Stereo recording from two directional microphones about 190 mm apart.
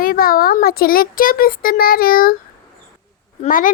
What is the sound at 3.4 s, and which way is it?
Speech, 45° left (ahead or behind).